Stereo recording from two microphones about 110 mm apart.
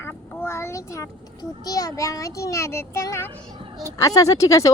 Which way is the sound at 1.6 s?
35° left (ahead or behind).